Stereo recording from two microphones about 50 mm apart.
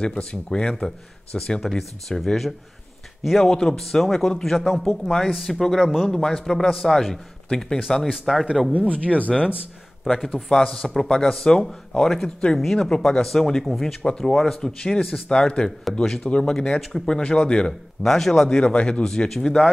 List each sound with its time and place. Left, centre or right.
0.0 s a man's voice: centre
6.0 s speech: centre
7.8 s a man's voice: centre
8.7 s speech: left
10.0 s a man's voice: centre
10.3 s a man's voice: centre
18.6 s speech: left
19.0 s a man's voice: centre